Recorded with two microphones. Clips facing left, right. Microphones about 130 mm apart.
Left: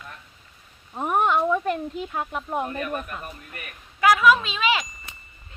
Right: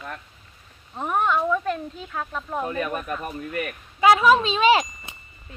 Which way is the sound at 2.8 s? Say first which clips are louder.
Right 3 dB; 90° right.